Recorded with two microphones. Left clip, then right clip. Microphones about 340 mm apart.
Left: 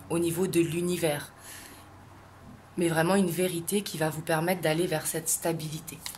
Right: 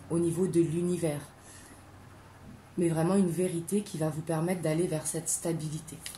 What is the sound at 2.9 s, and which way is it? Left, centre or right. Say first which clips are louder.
A woman's voice: left 6 dB; left.